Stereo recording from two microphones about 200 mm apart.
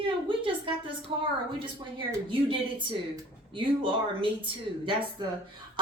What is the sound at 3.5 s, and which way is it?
Speech, 25° right (ahead or behind).